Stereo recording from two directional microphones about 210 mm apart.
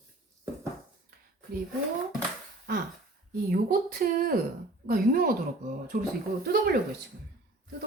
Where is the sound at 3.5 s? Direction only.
45° right (ahead or behind).